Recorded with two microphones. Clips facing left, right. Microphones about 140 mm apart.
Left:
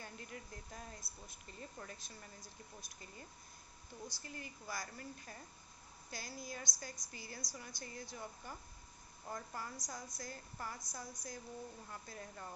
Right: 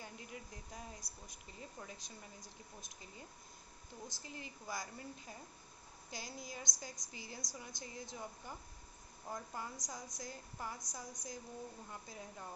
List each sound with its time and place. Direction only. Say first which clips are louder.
0.0 s speech: even; 10° right (ahead or behind)